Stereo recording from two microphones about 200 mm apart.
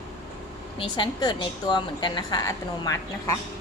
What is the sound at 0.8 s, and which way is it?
A woman's voice, 25° left (ahead or behind).